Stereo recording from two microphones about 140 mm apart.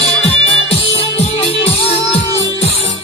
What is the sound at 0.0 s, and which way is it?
Music, 45° left (ahead or behind).